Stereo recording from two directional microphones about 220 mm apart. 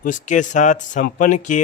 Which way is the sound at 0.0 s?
35° left (ahead or behind).